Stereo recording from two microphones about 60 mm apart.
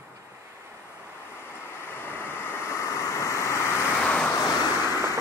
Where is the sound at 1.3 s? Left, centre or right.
Left.